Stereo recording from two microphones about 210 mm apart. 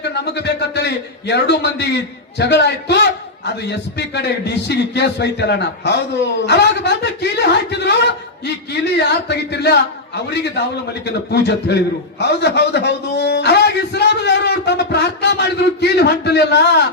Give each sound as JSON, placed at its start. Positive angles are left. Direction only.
{"t": 0.1, "sound": "a man's voice", "side_deg": 55}
{"t": 11.0, "sound": "a man's voice", "side_deg": 50}